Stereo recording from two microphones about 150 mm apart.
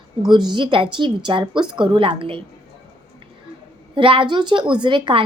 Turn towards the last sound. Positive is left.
turn(degrees=-35)  # may be behind; listen again after turning